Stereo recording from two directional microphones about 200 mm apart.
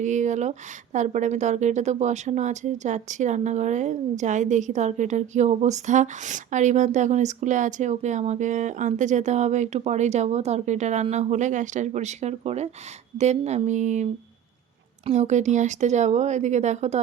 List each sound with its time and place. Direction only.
0.0 s a woman's voice: 35° right (ahead or behind)